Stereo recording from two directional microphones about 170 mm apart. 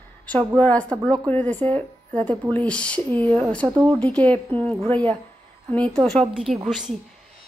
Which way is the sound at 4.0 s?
10° left (ahead or behind).